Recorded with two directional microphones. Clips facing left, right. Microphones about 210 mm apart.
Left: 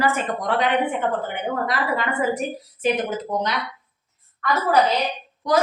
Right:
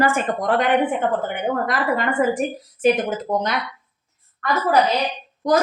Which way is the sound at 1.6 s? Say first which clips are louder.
Right 3 dB; 50° right (ahead or behind).